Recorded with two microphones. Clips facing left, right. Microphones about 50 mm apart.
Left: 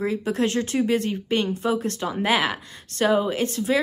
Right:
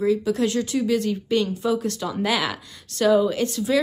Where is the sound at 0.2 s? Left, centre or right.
Left.